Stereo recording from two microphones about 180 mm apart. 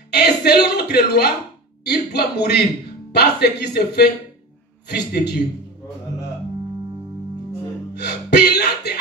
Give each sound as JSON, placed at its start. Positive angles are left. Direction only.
{"t": 0.1, "sound": "a man's voice", "side_deg": 65}
{"t": 7.9, "sound": "music", "side_deg": 65}